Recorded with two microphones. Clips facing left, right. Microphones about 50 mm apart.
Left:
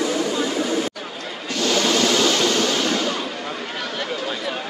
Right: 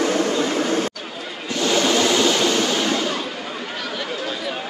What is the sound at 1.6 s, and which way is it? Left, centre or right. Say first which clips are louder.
Waves: right 1 dB; right.